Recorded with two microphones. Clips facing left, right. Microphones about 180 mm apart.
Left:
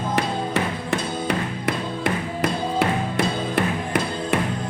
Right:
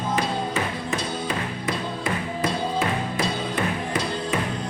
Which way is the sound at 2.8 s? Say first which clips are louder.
Left 3 dB; 70° left (ahead or behind).